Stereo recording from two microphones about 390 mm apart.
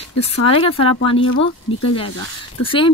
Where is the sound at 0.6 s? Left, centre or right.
Centre.